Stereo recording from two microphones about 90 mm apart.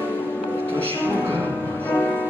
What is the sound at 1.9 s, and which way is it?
Music, 20° left (ahead or behind).